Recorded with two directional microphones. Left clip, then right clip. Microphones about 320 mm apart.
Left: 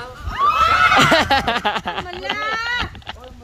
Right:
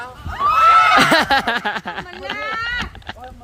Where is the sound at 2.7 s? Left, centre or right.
Centre.